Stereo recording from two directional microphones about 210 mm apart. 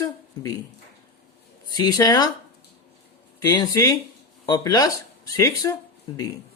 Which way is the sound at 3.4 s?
20° left (ahead or behind).